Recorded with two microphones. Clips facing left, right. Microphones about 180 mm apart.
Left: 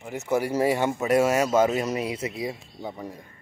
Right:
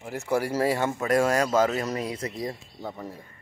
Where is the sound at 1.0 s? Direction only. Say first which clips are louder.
Left 1 dB; 10° left (ahead or behind).